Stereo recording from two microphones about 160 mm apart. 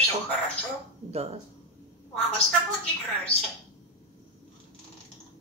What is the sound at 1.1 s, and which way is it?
Speech, 40° right (ahead or behind).